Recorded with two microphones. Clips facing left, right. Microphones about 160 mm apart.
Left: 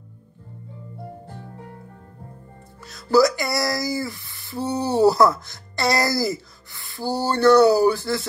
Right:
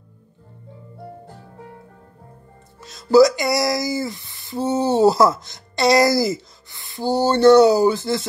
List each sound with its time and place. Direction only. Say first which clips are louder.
2.8 s speech: right 4 dB; 20° right (ahead or behind)